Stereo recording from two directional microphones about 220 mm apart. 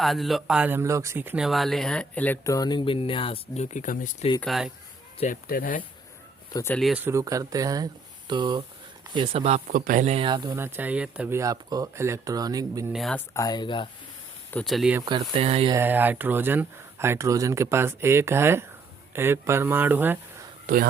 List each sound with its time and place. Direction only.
0.0 s speech: centre (ahead or behind); by 4.3 s 35° left (ahead or behind)
4.4 s speech: centre (ahead or behind)
5.2 s speech: 40° left (ahead or behind)
6.5 s speech: 15° left (ahead or behind)
6.7 s speech: 5° right (ahead or behind); by 10.5 s 20° right (ahead or behind)
10.5 s speech: 10° right (ahead or behind)
12.9 s speech: centre (ahead or behind)
13.3 s speech: 15° left (ahead or behind)
14.5 s speech: centre (ahead or behind)
15.0 s speech: 20° right (ahead or behind)
15.7 s speech: 10° right (ahead or behind)